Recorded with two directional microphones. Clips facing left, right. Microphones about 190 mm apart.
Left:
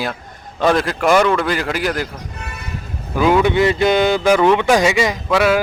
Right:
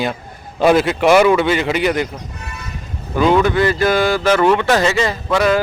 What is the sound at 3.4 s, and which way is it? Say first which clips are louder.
A man's voice: left 1 dB; 20° left (ahead or behind).